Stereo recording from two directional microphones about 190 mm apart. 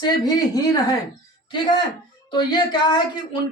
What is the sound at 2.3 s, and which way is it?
Speech, 25° left (ahead or behind).